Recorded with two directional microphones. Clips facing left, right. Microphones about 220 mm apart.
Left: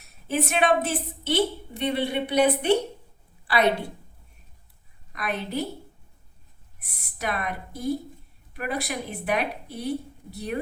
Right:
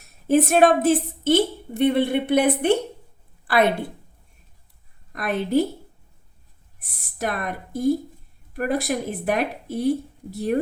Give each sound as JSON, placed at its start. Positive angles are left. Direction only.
{"t": 0.3, "sound": "a woman's voice", "side_deg": -45}
{"t": 3.4, "sound": "a sound", "side_deg": -50}
{"t": 5.1, "sound": "a woman's voice", "side_deg": -50}
{"t": 7.2, "sound": "a woman's voice", "side_deg": -45}